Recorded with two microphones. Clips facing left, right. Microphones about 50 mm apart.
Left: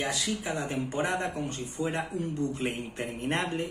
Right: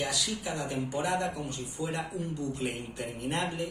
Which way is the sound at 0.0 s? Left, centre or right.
Left.